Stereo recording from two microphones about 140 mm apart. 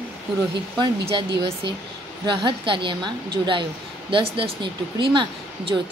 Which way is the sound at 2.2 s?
35° right (ahead or behind).